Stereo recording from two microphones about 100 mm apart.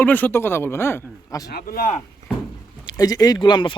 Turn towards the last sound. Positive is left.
turn(degrees=50)  # may be behind; listen again after turning